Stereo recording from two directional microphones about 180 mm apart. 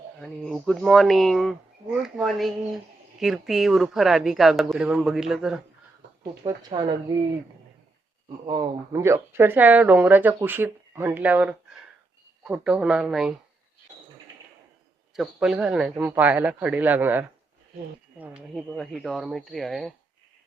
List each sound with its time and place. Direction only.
0.5 s speech: 5° right (ahead or behind)
6.4 s speech: 25° right (ahead or behind)
8.4 s speech: 15° right (ahead or behind)
15.1 s speech: centre (ahead or behind)